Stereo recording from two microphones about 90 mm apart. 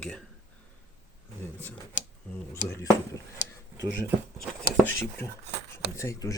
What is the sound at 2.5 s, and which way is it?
Speech, 30° left (ahead or behind).